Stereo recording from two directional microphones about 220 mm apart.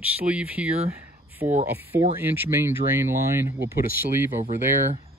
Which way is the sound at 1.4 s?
35° right (ahead or behind).